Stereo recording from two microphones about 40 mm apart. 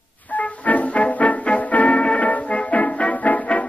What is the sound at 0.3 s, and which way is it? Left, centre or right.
Music, left.